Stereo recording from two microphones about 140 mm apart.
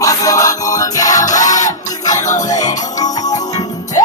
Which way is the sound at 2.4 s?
25° left (ahead or behind).